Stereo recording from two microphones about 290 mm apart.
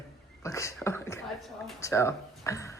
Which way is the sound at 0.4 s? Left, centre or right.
Centre.